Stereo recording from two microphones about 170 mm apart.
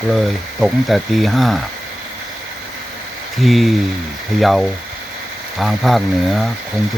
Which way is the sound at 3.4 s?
Centre (ahead or behind).